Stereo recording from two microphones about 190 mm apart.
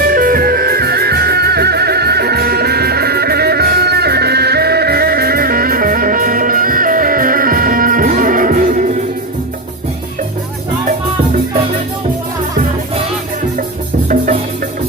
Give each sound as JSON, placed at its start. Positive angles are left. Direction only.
{"t": 0.1, "sound": "music", "side_deg": -45}